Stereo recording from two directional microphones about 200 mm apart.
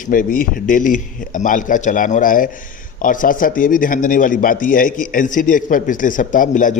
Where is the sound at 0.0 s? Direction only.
45° left (ahead or behind).